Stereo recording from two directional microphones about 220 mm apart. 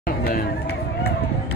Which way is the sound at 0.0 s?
40° left (ahead or behind).